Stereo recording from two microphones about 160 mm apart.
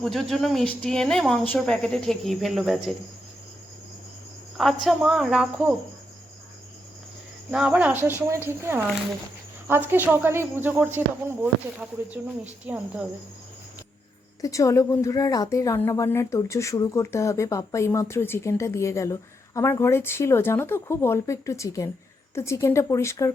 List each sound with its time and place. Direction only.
0.0 s speech: centre (ahead or behind)
4.5 s speech: centre (ahead or behind)
7.5 s speech: 5° right (ahead or behind)
14.4 s a woman's voice: 20° left (ahead or behind)